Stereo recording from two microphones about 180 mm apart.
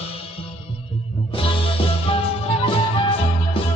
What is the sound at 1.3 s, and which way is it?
Music, 30° left (ahead or behind).